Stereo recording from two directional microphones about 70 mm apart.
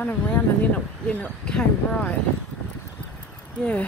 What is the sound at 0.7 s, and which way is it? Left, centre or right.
Speech, centre.